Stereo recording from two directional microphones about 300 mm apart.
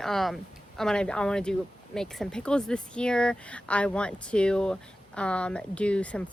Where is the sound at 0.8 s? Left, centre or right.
Centre.